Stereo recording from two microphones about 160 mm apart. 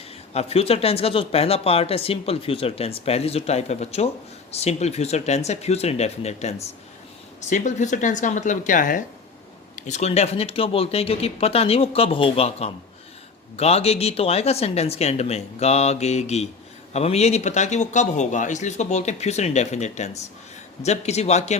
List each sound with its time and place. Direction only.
0.3 s speech: 40° left (ahead or behind)